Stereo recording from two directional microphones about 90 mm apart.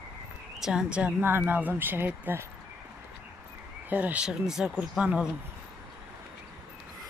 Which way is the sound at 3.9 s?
15° right (ahead or behind).